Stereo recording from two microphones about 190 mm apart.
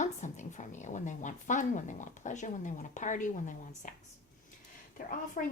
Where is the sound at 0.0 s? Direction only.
40° left (ahead or behind).